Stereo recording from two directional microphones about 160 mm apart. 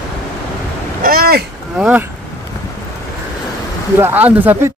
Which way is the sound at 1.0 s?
70° right (ahead or behind).